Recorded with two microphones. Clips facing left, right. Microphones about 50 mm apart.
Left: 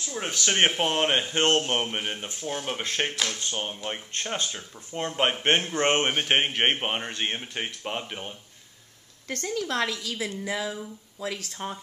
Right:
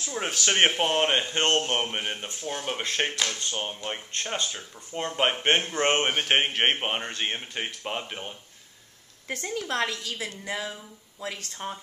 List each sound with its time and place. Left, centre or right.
0.1 s a woman's voice: centre